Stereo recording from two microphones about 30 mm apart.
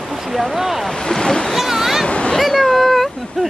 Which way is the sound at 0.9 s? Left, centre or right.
Left.